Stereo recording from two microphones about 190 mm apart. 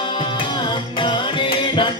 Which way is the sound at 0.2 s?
25° left (ahead or behind).